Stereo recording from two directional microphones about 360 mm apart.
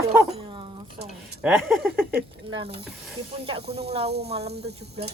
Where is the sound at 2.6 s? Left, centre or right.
Centre.